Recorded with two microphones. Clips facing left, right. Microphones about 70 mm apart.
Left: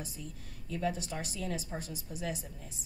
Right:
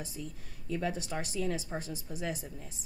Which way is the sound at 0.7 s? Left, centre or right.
Right.